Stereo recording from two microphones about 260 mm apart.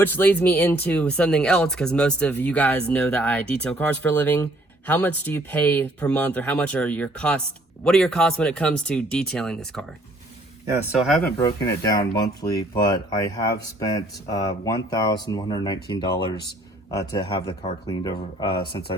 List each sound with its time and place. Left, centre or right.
0.0 s speech: centre
11.3 s speech: centre